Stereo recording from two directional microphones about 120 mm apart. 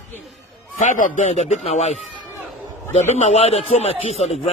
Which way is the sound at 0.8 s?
90° left.